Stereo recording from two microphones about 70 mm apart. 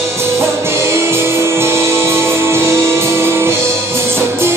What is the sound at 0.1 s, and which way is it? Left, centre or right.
Music, right.